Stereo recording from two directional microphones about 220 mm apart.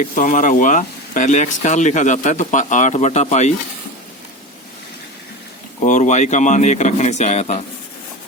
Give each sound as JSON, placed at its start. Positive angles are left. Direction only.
{"t": 0.2, "sound": "speech", "side_deg": 35}
{"t": 5.8, "sound": "speech", "side_deg": 35}